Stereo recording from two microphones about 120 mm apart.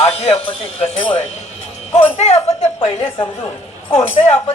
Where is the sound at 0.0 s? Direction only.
55° left (ahead or behind).